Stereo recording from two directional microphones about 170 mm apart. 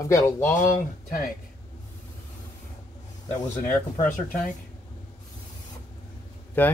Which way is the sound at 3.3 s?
45° left (ahead or behind).